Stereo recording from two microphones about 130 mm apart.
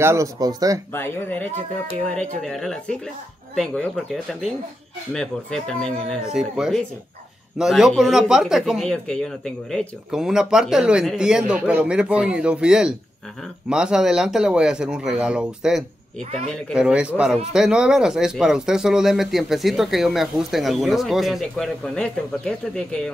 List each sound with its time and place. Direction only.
0.0 s speech: 20° right (ahead or behind)
0.9 s a man's voice: 15° left (ahead or behind)